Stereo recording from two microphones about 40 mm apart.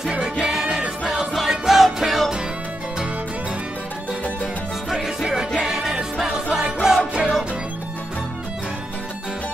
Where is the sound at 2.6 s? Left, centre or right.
Right.